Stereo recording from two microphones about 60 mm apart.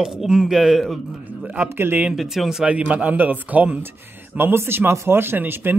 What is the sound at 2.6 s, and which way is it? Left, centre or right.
A man's voice, right.